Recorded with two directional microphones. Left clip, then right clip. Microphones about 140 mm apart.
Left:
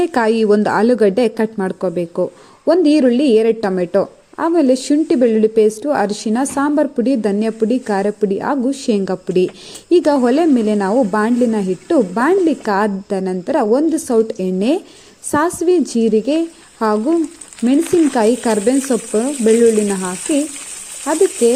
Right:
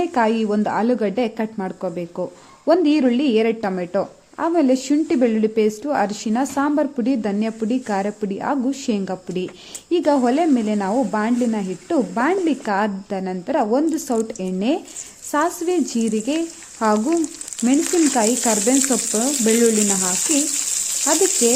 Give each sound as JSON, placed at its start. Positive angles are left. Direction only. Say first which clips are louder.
{"t": 0.0, "sound": "a woman's voice", "louder": "left 5 dB", "side_deg": 45}